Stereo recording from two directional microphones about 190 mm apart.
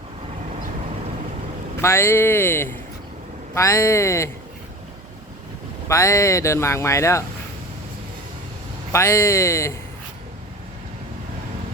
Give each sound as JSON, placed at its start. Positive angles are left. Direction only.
{"t": 1.8, "sound": "speech", "side_deg": 15}
{"t": 5.9, "sound": "speech", "side_deg": 15}
{"t": 8.9, "sound": "speech", "side_deg": 15}